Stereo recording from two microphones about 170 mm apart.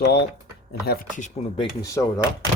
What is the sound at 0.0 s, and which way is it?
Speech, 75° left (ahead or behind).